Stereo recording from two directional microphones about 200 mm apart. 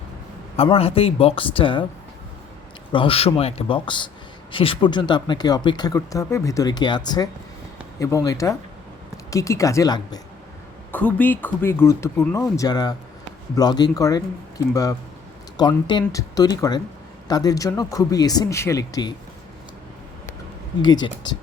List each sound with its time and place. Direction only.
0.5 s speech: 30° left (ahead or behind)
2.9 s speech: 25° left (ahead or behind)
10.9 s speech: 10° left (ahead or behind)
20.8 s speech: 20° left (ahead or behind)